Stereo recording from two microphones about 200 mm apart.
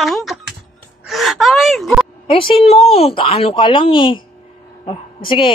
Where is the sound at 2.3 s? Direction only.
25° left (ahead or behind).